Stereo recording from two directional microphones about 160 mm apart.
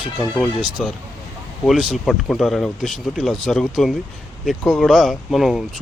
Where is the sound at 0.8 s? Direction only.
Centre (ahead or behind).